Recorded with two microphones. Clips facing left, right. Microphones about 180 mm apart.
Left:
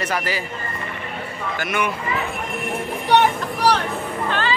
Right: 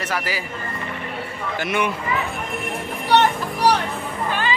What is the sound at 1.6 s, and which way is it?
Speech, 30° right (ahead or behind).